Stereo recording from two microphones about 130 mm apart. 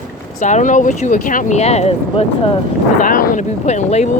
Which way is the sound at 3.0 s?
90° left.